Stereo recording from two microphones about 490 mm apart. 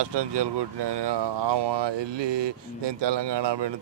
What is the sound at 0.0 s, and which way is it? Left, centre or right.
Speech, right.